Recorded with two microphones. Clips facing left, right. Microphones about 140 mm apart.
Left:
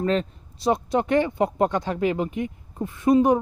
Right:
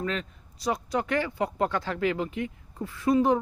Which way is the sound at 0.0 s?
30° left (ahead or behind).